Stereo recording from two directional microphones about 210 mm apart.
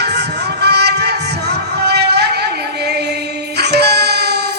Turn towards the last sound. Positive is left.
turn(degrees=-50)  # may be behind; listen again after turning